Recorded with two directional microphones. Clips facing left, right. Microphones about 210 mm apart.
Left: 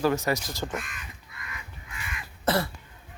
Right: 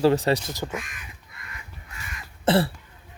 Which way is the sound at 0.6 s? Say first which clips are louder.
Right 1 dB; centre (ahead or behind).